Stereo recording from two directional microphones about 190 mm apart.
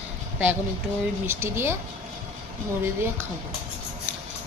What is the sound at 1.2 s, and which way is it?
Speech, 15° right (ahead or behind).